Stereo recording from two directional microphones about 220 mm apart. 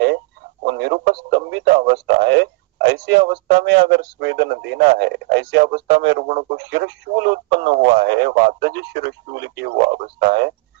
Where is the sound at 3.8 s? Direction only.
50° right (ahead or behind).